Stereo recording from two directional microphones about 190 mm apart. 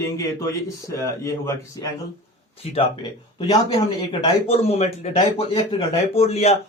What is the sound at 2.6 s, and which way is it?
Speech, 30° left (ahead or behind).